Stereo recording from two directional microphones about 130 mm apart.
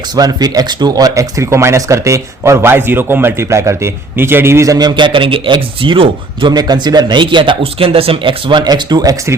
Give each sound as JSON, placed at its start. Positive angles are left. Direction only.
{"t": 0.2, "sound": "speech", "side_deg": -30}